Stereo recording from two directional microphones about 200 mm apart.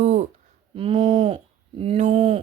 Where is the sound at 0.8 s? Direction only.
30° right (ahead or behind).